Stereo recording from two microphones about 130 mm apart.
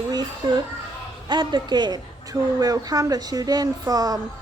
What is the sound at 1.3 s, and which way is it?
Speech, 35° right (ahead or behind).